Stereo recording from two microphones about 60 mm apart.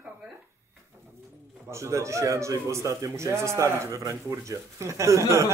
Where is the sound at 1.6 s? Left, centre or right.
Right.